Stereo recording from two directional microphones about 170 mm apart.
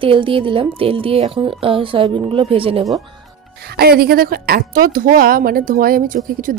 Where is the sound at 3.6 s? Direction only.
70° right (ahead or behind).